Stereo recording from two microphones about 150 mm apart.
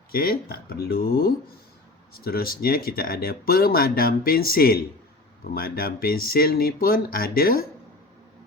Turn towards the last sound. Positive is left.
turn(degrees=80)